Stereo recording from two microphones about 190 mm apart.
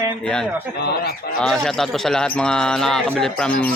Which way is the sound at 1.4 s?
Centre (ahead or behind).